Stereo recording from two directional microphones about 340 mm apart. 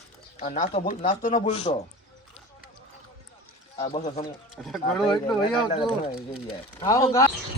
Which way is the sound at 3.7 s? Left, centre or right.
Centre.